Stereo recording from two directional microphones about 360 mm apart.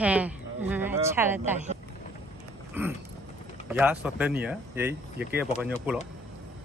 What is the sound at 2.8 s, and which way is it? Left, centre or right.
Speech, centre.